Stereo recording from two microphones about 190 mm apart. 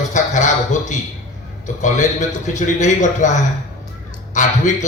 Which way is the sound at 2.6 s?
40° left (ahead or behind).